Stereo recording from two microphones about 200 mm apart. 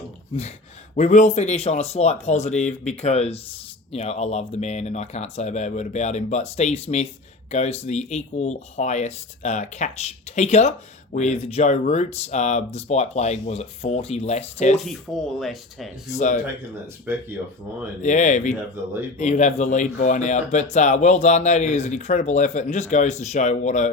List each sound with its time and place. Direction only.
0.9 s speech: 35° left (ahead or behind)
15.4 s speech: centre (ahead or behind)
16.1 s speech: 35° left (ahead or behind)
16.8 s speech: 10° right (ahead or behind)
18.0 s speech: 35° left (ahead or behind)